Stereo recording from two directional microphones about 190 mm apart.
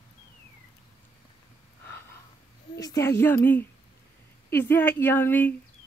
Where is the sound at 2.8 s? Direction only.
15° left (ahead or behind).